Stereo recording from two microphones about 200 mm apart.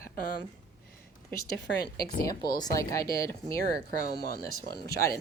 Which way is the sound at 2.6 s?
15° left (ahead or behind).